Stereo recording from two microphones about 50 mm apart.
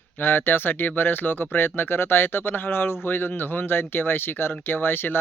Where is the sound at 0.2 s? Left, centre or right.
Left.